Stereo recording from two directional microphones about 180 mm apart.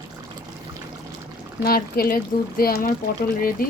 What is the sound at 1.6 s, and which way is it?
Speech, 55° left (ahead or behind).